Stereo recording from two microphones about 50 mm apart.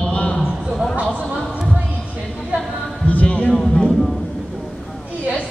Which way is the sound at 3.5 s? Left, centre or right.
Centre.